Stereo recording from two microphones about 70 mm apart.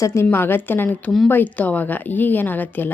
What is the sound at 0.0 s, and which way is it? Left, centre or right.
Speech, left.